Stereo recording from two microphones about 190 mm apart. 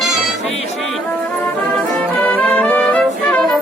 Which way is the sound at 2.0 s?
5° left (ahead or behind).